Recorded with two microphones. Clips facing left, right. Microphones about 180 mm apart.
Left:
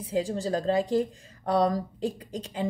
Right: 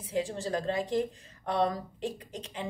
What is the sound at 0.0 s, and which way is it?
A woman's voice, 35° left (ahead or behind).